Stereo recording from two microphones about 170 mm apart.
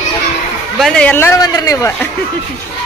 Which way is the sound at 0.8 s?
5° left (ahead or behind).